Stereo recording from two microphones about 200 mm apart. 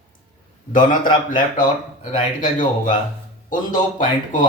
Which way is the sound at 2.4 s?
40° left (ahead or behind).